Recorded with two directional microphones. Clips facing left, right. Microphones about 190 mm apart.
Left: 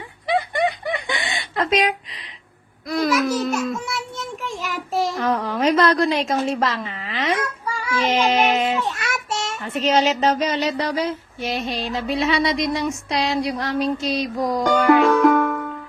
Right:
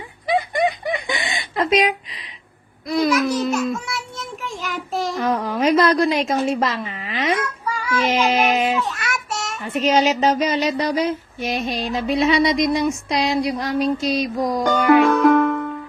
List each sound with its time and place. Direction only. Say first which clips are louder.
0.3 s snicker: right 1 dB; 15° right (ahead or behind)
2.9 s child singing: right 2 dB; centre (ahead or behind)
5.2 s female singing: right 3 dB; 10° right (ahead or behind)
8.7 s child singing: right 1 dB; 25° left (ahead or behind)
9.6 s female singing: right 2 dB; 10° right (ahead or behind)
15.2 s music: right 2 dB; centre (ahead or behind)